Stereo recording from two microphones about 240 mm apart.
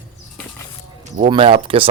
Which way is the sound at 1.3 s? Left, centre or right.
Right.